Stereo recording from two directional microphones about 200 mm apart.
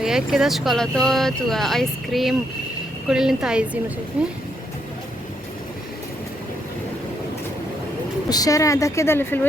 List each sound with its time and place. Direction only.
0.0 s speech: 5° right (ahead or behind)
8.3 s speech: 15° left (ahead or behind)